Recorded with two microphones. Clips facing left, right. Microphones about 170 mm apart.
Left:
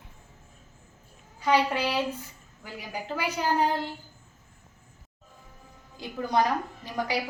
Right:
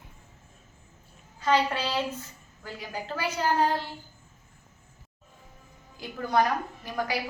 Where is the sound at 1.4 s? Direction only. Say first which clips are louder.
Left 1 dB; 15° left (ahead or behind).